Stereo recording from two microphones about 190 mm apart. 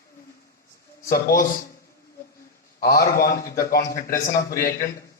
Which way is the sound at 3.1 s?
50° left (ahead or behind).